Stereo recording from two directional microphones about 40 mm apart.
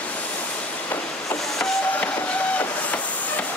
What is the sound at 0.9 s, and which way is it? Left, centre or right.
Train, left.